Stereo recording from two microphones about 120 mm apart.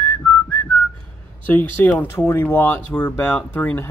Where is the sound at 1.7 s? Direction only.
15° left (ahead or behind).